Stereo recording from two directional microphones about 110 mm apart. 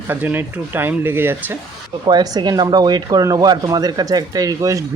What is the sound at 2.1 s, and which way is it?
Speech, 40° right (ahead or behind).